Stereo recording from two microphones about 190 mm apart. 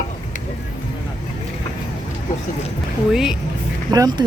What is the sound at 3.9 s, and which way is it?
Speech, 20° right (ahead or behind).